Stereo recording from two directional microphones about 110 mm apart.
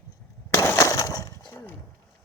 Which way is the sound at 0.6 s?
25° left (ahead or behind).